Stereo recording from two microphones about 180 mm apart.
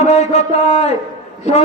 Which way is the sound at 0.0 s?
35° left (ahead or behind).